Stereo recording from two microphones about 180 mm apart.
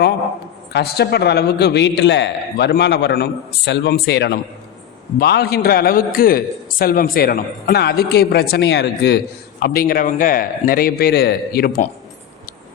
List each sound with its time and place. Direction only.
0.7 s a man's voice: 65° left (ahead or behind)